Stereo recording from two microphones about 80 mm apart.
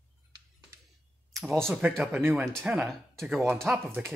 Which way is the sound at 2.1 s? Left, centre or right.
Right.